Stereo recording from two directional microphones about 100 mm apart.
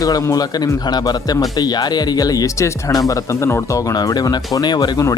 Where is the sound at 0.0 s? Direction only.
35° left (ahead or behind).